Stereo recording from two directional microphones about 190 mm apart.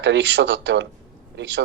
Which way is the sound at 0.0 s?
70° right (ahead or behind).